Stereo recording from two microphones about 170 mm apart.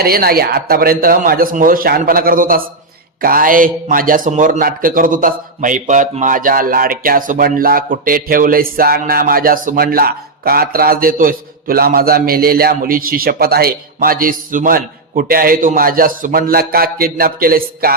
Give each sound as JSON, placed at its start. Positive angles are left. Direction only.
{"t": 0.0, "sound": "a man's voice", "side_deg": -60}